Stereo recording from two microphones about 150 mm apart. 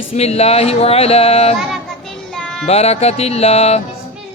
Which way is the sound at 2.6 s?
45° left (ahead or behind).